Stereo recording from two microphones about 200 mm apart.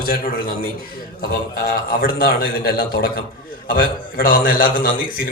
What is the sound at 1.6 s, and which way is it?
Speech, 45° left (ahead or behind).